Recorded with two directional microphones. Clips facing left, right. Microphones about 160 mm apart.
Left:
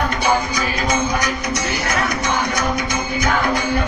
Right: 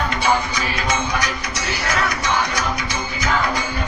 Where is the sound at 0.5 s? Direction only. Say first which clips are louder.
Left 3 dB; 40° left (ahead or behind).